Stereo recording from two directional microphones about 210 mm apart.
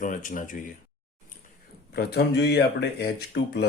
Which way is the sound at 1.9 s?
50° left (ahead or behind).